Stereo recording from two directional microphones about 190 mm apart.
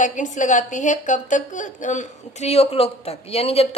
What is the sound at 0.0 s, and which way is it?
A woman's voice, 40° left (ahead or behind).